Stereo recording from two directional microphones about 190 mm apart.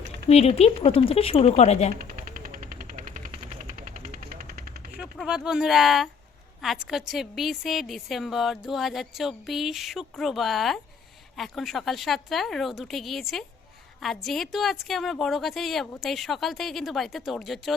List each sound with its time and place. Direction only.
0.3 s speech: 35° left (ahead or behind)
2.0 s a sound: 45° right (ahead or behind)
4.9 s a woman's voice: 5° right (ahead or behind)